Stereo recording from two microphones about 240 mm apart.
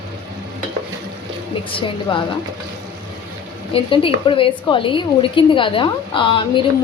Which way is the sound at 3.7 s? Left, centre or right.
Left.